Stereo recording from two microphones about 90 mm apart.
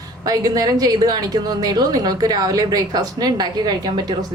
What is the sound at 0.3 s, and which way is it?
A woman's voice, 45° right (ahead or behind).